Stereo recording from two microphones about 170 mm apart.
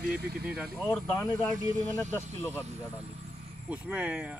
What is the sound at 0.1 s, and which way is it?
Speech, 10° right (ahead or behind).